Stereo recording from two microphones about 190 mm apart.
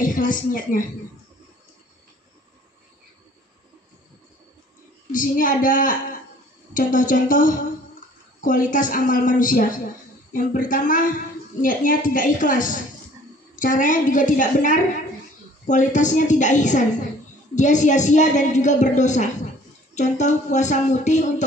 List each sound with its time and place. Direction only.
0.0 s a woman's voice: 45° left (ahead or behind)
5.1 s a woman's voice: 45° left (ahead or behind)